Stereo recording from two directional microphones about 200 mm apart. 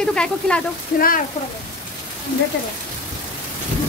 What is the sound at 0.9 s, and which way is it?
Speech, 45° left (ahead or behind).